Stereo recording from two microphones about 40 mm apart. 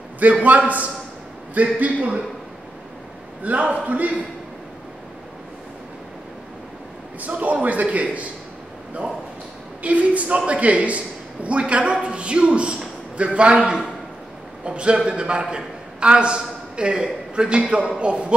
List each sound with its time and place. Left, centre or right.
0.2 s a man's voice: right
3.4 s a man's voice: right
7.2 s a man's voice: right
9.8 s a man's voice: right